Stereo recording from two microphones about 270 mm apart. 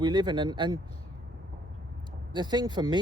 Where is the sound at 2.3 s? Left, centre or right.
Centre.